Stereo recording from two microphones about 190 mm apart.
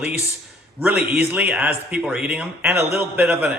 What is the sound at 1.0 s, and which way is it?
Speech, 55° right (ahead or behind).